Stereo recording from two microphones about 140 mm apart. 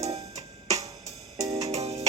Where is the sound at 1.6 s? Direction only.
50° right (ahead or behind).